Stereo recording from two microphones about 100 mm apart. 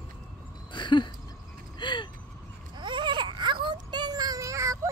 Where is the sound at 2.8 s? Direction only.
50° right (ahead or behind); by 4.7 s 30° right (ahead or behind).